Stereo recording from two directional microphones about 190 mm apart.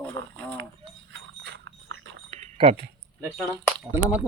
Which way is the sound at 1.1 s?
70° right (ahead or behind).